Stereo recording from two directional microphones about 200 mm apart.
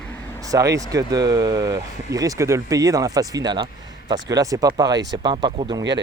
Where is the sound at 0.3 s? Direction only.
15° right (ahead or behind).